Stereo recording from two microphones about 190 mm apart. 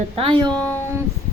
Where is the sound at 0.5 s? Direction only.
5° left (ahead or behind).